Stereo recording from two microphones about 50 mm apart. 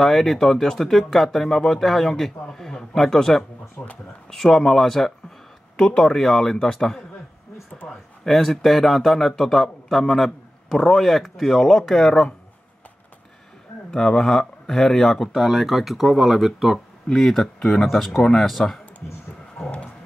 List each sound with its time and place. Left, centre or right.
0.0 s a man's voice: centre
3.8 s speech: left
4.3 s a man's voice: centre
13.8 s speech: centre
15.3 s a man's voice: centre
17.1 s a man's voice: centre